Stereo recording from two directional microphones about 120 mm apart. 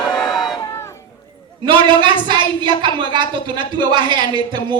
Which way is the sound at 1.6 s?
40° right (ahead or behind).